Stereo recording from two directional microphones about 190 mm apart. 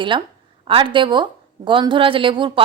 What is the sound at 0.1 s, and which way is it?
A woman's voice, 25° right (ahead or behind).